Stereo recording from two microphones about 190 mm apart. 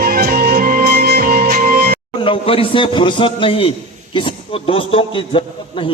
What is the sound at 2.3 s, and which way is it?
A man's voice, 30° left (ahead or behind).